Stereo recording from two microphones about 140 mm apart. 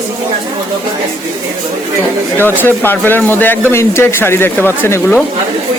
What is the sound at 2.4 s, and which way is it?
Speech, 15° left (ahead or behind).